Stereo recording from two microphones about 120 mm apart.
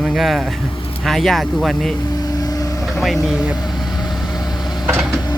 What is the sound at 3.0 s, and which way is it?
Speech, centre (ahead or behind).